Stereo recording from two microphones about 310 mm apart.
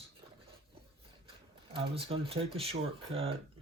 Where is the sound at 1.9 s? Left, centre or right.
Centre.